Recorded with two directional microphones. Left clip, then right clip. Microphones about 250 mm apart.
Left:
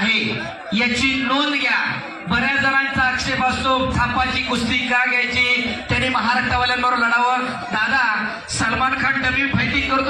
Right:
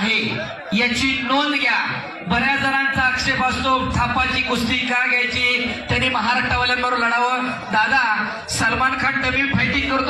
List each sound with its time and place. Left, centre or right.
2.4 s a man's voice: right